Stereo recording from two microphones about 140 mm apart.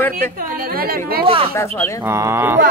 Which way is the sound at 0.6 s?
90° right.